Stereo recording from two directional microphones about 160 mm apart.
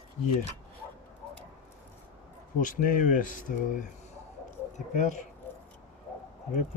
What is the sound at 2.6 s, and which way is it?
Speech, 55° left (ahead or behind).